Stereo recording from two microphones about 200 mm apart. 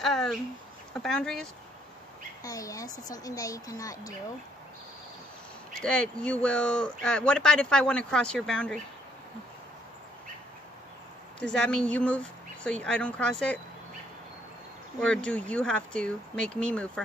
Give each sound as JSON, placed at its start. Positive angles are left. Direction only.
{"t": 0.0, "sound": "speech", "side_deg": 0}
{"t": 2.4, "sound": "a woman's voice", "side_deg": 15}
{"t": 5.8, "sound": "speech", "side_deg": 5}
{"t": 11.3, "sound": "speech", "side_deg": 5}
{"t": 15.0, "sound": "speech", "side_deg": 5}